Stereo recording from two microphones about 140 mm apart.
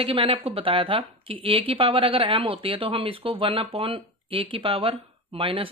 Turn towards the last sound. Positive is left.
turn(degrees=-40)  # may be behind; listen again after turning